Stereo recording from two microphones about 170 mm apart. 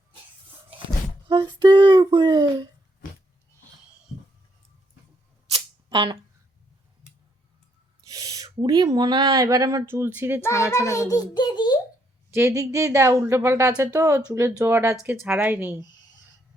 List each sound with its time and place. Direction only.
1.3 s speech: 25° right (ahead or behind)
5.5 s camera: 35° right (ahead or behind)
8.0 s owl: 20° right (ahead or behind)
8.4 s speech: 25° right (ahead or behind)
10.7 s a child's voice: 15° left (ahead or behind)
12.3 s speech: 15° right (ahead or behind)